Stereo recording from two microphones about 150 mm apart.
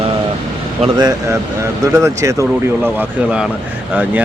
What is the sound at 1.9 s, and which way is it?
Speech, 20° right (ahead or behind).